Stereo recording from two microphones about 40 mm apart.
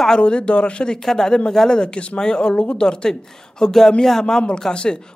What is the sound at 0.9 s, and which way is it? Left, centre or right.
Speech, centre.